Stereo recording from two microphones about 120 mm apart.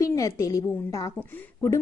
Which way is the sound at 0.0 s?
25° left (ahead or behind).